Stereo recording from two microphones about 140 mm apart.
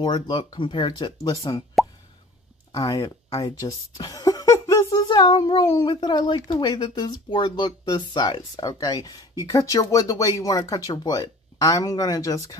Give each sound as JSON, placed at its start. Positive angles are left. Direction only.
{"t": 0.0, "sound": "speech", "side_deg": 35}
{"t": 2.7, "sound": "speech", "side_deg": 25}